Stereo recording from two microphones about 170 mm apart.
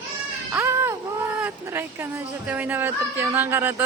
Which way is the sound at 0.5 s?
15° right (ahead or behind).